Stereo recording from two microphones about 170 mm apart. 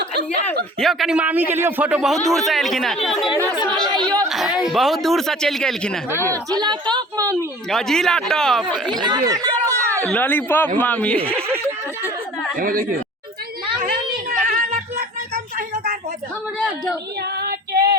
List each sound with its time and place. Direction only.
0.8 s a man's voice: centre (ahead or behind)
3.7 s a woman's voice: 25° right (ahead or behind)
4.3 s a sound: centre (ahead or behind)
4.7 s speech: centre (ahead or behind)
6.3 s a woman's voice: 25° right (ahead or behind)
7.7 s speech: centre (ahead or behind)
8.9 s a sound: 25° right (ahead or behind)
10.0 s speech: 10° left (ahead or behind)
12.5 s speech: 55° right (ahead or behind)
13.8 s a sound: 65° right (ahead or behind)
17.3 s female singing: 65° right (ahead or behind)